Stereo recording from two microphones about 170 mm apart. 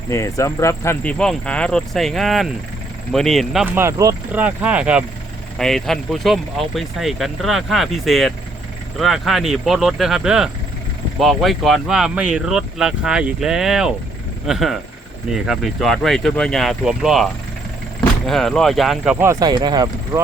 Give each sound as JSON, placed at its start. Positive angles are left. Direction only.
{"t": 0.1, "sound": "speech", "side_deg": 20}
{"t": 3.8, "sound": "speech", "side_deg": -15}
{"t": 18.3, "sound": "speech", "side_deg": 0}
{"t": 19.2, "sound": "speech", "side_deg": -20}